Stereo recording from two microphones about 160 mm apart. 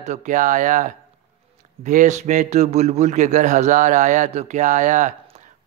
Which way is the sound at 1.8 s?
50° right (ahead or behind).